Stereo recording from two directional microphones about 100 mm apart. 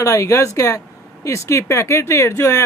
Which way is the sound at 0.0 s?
30° left (ahead or behind).